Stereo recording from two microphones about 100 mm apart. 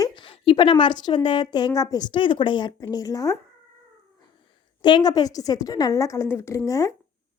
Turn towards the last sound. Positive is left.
turn(degrees=35)  # may be behind; listen again after turning